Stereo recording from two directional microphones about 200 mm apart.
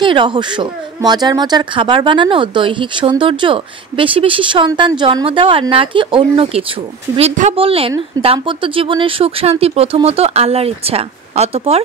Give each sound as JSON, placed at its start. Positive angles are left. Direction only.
{"t": 0.0, "sound": "speech", "side_deg": -25}